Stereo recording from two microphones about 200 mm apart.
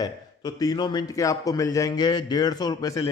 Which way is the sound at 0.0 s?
20° left (ahead or behind).